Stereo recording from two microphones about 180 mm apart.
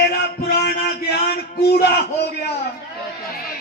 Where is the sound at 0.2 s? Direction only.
65° left (ahead or behind).